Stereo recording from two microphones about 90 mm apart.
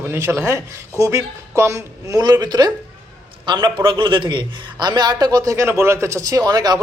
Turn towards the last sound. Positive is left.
turn(degrees=-45)  # may be behind; listen again after turning